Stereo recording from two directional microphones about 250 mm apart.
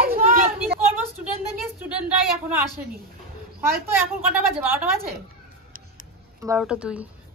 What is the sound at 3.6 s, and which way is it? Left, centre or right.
Speech, centre.